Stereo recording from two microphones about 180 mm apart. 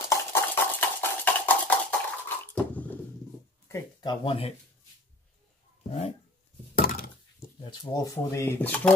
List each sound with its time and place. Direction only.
0.3 s a sound: 10° left (ahead or behind)
3.6 s speech: 20° left (ahead or behind)
5.9 s dog: 35° left (ahead or behind)
6.7 s thunk: 50° left (ahead or behind)
7.3 s a sound: 25° left (ahead or behind)
8.0 s speech: 15° left (ahead or behind)